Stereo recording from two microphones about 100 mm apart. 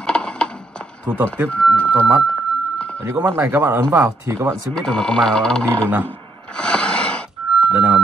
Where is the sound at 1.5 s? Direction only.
15° left (ahead or behind).